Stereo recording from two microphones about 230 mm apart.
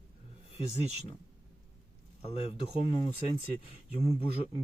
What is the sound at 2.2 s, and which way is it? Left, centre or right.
Speech, left.